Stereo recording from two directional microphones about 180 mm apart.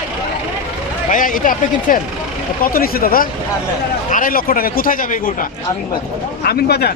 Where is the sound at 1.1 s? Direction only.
50° left (ahead or behind).